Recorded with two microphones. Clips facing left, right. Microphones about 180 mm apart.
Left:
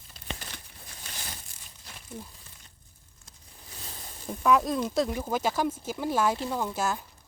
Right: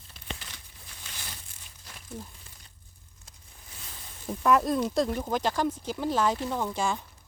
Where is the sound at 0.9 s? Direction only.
40° left (ahead or behind).